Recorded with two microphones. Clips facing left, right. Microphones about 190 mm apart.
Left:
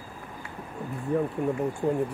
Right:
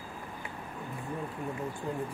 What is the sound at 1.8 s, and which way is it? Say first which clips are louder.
Speech: left 11 dB; 60° left (ahead or behind).